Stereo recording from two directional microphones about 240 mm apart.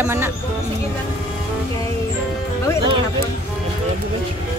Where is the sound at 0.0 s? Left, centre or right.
Centre.